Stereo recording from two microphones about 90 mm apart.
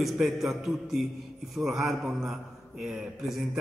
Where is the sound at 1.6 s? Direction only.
Centre (ahead or behind).